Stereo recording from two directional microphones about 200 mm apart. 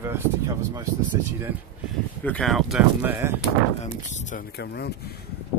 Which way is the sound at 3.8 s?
35° left (ahead or behind).